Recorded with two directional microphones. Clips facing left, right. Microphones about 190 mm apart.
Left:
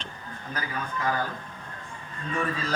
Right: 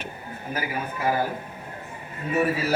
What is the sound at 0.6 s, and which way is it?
Speech, 10° right (ahead or behind).